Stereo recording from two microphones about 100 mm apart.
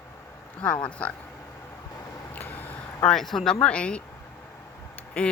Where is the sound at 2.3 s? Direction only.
15° left (ahead or behind).